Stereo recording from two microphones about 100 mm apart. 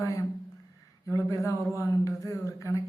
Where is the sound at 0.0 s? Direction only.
30° left (ahead or behind).